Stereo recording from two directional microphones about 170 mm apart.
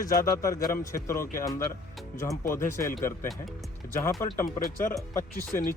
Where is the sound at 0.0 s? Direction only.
50° left (ahead or behind).